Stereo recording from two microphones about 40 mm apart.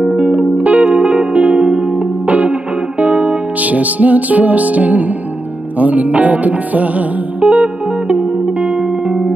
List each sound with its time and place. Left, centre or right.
0.1 s music: right
2.2 s music: right